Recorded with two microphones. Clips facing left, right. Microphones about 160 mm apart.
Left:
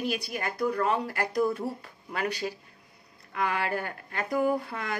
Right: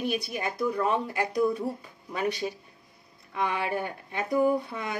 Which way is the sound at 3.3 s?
20° right (ahead or behind).